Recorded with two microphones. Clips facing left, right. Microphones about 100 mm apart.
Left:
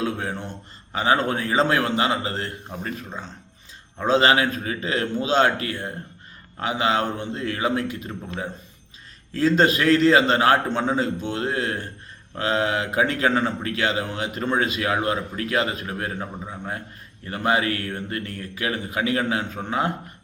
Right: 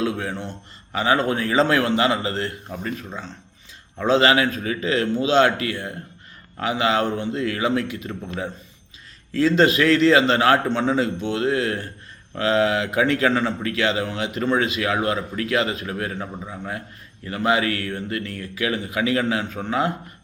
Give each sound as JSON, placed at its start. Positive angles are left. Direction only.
{"t": 0.9, "sound": "a man's voice", "side_deg": 30}
{"t": 4.0, "sound": "a man's voice", "side_deg": 40}